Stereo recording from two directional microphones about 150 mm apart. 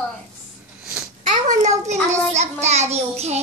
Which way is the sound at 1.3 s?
55° right (ahead or behind).